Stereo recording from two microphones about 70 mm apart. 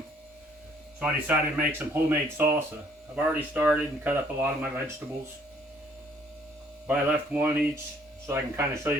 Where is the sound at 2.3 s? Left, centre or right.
Right.